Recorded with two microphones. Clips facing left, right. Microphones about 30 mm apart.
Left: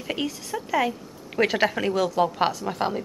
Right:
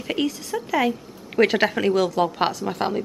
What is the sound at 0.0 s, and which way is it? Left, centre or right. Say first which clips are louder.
A woman's voice: right 4 dB; centre.